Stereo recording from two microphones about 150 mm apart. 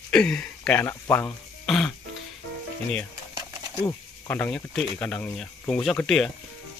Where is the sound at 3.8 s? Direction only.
15° left (ahead or behind).